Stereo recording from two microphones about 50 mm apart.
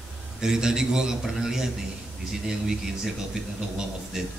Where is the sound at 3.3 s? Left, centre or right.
Centre.